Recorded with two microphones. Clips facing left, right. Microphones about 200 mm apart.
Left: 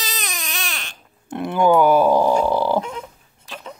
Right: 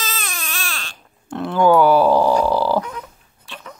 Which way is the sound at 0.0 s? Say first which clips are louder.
Right 1 dB; 15° left (ahead or behind).